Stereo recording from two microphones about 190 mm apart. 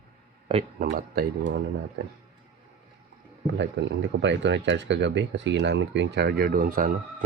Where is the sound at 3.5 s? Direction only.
70° right (ahead or behind).